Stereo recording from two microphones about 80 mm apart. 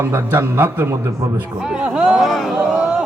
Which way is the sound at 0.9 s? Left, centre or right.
Right.